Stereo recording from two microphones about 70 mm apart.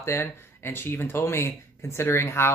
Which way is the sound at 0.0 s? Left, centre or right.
Left.